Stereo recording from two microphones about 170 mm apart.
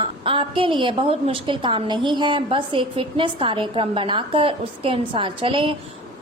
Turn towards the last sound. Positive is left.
turn(degrees=-30)  # may be behind; listen again after turning